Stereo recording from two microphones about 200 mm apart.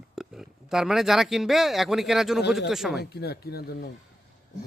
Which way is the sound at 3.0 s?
55° left (ahead or behind).